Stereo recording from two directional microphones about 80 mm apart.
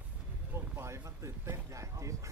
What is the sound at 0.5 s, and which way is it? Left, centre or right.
Speech, right.